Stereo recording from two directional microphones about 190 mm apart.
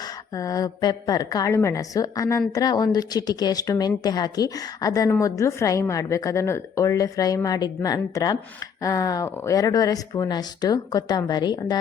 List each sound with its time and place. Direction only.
0.3 s a woman's voice: 20° left (ahead or behind)